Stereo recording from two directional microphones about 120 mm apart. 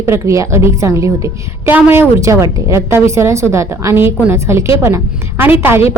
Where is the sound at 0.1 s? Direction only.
25° right (ahead or behind).